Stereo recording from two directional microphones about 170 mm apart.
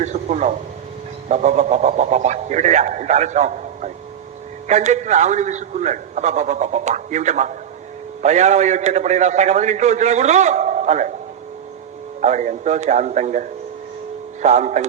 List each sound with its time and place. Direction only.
0.0 s a sound: 45° right (ahead or behind)
1.3 s a man's voice: 45° right (ahead or behind)
12.2 s a man's voice: 45° right (ahead or behind)